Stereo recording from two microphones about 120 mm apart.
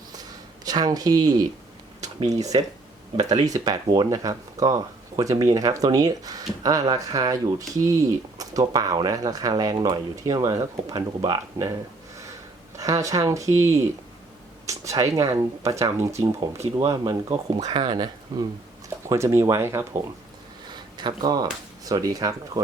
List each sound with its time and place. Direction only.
0.2 s a sound: 35° right (ahead or behind)
2.3 s speech: 30° right (ahead or behind)
12.7 s speech: 25° right (ahead or behind)
19.0 s speech: 25° right (ahead or behind)
20.7 s a sound: 40° right (ahead or behind)
21.8 s speech: 30° right (ahead or behind)